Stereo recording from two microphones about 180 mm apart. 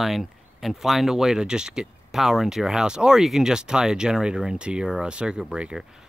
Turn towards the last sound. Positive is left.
turn(degrees=-5)  # may be behind; listen again after turning